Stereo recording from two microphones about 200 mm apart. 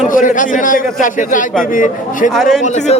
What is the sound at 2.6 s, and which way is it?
Speech, 35° left (ahead or behind).